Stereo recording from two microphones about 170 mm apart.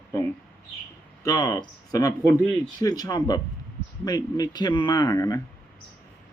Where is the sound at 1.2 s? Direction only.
20° left (ahead or behind).